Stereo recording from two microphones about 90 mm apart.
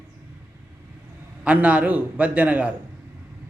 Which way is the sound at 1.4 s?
15° right (ahead or behind).